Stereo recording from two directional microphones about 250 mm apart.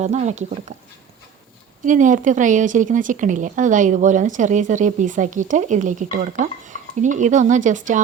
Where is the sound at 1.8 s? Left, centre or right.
Right.